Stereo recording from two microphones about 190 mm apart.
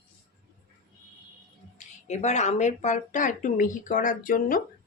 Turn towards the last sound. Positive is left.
turn(degrees=45)  # may be behind; listen again after turning